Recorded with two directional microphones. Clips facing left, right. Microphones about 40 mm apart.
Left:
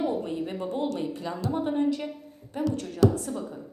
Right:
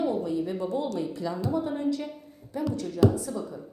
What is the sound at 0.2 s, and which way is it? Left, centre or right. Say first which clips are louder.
A woman's voice: right 2 dB; left.